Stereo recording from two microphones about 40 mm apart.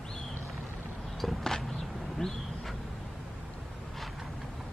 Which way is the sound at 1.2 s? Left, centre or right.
Centre.